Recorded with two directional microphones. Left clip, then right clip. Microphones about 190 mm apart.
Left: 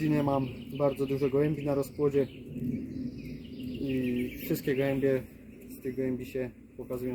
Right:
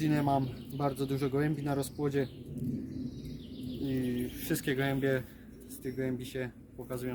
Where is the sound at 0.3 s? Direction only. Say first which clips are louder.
Left 1 dB; 20° right (ahead or behind).